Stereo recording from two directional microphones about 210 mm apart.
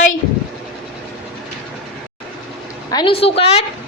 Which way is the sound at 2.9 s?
25° left (ahead or behind).